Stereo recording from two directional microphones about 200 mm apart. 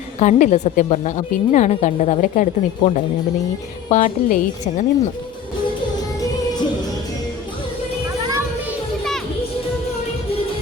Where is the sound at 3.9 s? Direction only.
45° left (ahead or behind).